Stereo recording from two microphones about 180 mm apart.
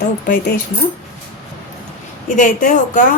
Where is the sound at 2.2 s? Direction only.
45° left (ahead or behind).